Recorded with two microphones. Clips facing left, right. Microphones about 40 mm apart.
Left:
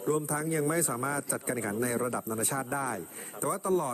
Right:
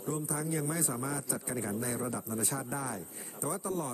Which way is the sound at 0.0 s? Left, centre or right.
Left.